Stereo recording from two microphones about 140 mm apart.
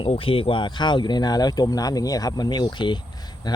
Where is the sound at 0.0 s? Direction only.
40° left (ahead or behind).